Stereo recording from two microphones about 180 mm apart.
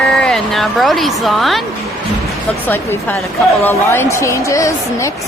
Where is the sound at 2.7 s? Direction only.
10° left (ahead or behind).